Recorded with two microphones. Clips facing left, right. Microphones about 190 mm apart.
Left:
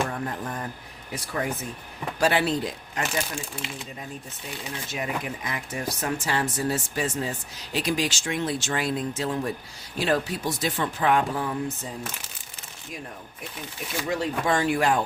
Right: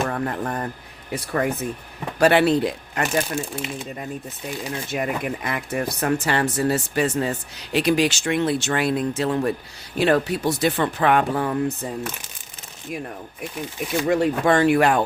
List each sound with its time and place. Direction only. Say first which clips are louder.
0.1 s speech: right 6 dB; 65° right (ahead or behind)
4.9 s speech: right 5 dB; 60° right (ahead or behind)
14.1 s speech: right 6 dB; 60° right (ahead or behind)